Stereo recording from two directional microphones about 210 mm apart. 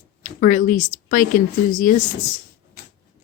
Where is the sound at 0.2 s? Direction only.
40° left (ahead or behind).